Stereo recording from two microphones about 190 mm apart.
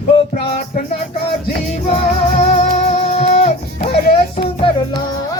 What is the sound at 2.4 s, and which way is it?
Music, 35° left (ahead or behind).